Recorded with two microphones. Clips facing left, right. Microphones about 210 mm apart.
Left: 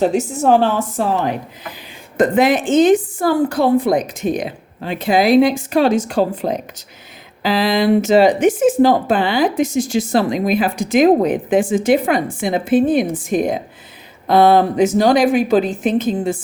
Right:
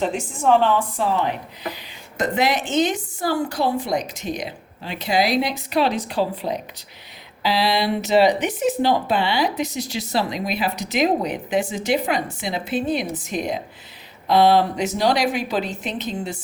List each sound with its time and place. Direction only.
0.0 s a woman's voice: 40° left (ahead or behind)
2.1 s speech: 55° left (ahead or behind)